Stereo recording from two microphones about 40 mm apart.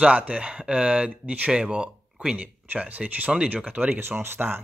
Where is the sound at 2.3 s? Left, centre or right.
Right.